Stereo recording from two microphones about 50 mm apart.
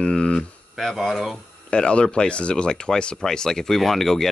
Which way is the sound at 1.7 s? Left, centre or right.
Centre.